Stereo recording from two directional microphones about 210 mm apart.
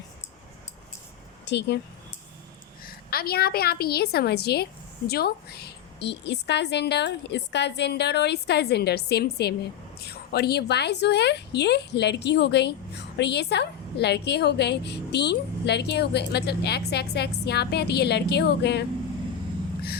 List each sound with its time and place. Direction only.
1.5 s speech: 55° left (ahead or behind)
2.8 s a woman's voice: 45° left (ahead or behind)